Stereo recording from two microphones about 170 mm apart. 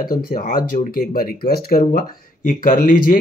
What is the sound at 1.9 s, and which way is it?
Speech, 55° left (ahead or behind).